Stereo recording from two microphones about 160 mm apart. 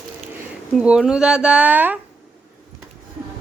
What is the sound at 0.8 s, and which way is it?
Speech, 5° right (ahead or behind).